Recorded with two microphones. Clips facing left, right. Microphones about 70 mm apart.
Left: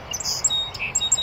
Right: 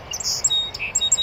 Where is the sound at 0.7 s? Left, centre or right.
Centre.